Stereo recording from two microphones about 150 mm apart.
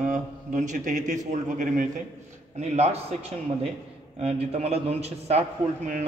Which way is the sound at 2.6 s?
45° right (ahead or behind).